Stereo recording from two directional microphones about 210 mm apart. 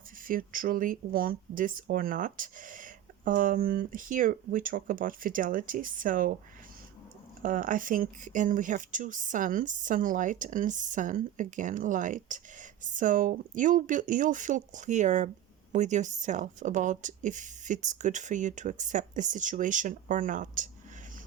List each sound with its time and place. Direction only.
0.2 s speech: 40° right (ahead or behind)
7.4 s speech: 40° right (ahead or behind)